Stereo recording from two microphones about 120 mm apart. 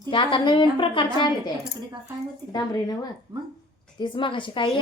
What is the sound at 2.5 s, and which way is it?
Speech, 35° left (ahead or behind).